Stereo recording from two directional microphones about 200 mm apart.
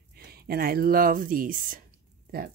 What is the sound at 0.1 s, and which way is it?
Speech, 50° right (ahead or behind).